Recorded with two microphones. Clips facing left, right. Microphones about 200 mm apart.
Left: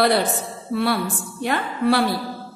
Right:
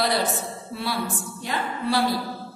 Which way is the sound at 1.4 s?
60° left (ahead or behind).